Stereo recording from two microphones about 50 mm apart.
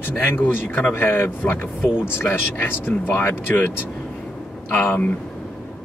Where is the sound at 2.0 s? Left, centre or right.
Left.